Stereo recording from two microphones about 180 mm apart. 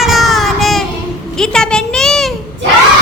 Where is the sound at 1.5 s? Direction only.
5° left (ahead or behind).